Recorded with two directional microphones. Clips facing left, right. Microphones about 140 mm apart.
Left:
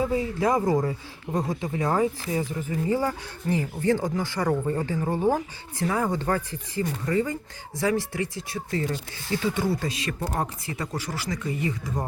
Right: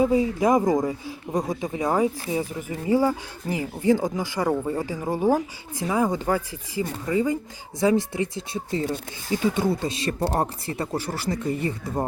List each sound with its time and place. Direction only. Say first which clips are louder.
0.0 s speech: right 4 dB; 15° right (ahead or behind)